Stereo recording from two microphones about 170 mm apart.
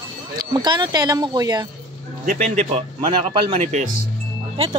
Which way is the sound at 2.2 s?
50° right (ahead or behind).